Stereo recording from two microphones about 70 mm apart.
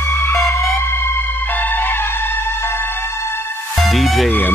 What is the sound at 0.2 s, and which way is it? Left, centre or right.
Music, left.